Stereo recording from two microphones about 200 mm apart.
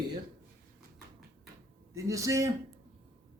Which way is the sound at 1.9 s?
15° right (ahead or behind).